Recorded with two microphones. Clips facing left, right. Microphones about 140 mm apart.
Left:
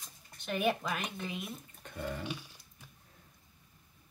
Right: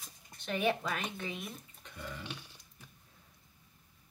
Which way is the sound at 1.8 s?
50° left (ahead or behind).